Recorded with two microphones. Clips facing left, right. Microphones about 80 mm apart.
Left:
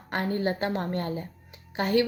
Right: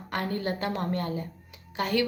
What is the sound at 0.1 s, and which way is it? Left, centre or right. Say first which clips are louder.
A woman's voice: left 3 dB; left.